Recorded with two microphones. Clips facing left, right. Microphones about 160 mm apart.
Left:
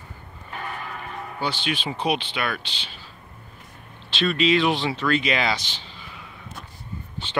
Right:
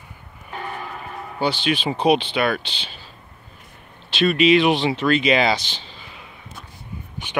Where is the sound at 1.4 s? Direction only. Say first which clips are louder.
Right 6 dB; 75° right (ahead or behind).